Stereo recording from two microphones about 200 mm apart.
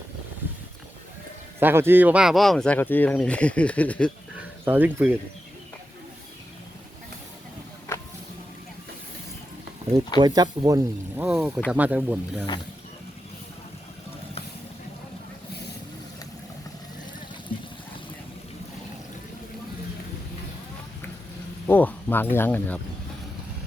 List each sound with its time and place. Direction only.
1.5 s speech: 10° right (ahead or behind); by 4.1 s 5° left (ahead or behind)
4.6 s speech: 10° right (ahead or behind)
10.2 s speech: 20° right (ahead or behind)
11.3 s speech: 5° right (ahead or behind)
21.7 s speech: 10° left (ahead or behind)